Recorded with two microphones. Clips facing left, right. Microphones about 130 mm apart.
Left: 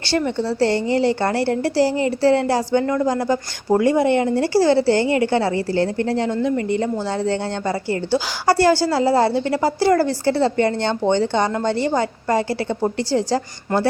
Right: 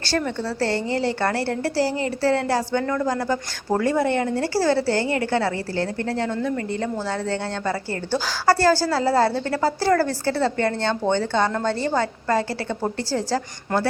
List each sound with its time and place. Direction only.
0.2 s a woman's voice: 20° left (ahead or behind)